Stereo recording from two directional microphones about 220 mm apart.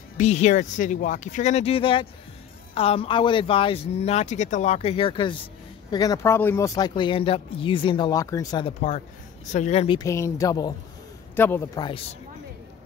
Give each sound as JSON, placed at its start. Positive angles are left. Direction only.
{"t": 0.2, "sound": "speech", "side_deg": 30}
{"t": 9.9, "sound": "speech", "side_deg": 15}